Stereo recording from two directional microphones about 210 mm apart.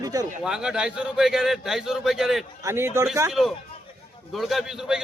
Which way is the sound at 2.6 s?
10° right (ahead or behind).